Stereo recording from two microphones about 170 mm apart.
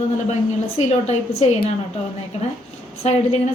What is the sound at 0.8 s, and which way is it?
Speech, 40° left (ahead or behind).